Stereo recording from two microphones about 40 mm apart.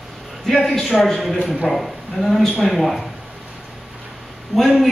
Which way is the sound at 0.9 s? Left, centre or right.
Centre.